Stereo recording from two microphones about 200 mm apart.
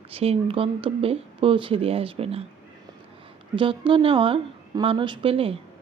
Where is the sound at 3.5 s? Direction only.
25° right (ahead or behind).